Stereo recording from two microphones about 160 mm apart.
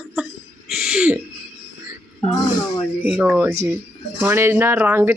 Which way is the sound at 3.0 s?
10° right (ahead or behind).